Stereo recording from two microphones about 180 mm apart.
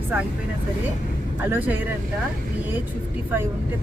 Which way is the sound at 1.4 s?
10° right (ahead or behind).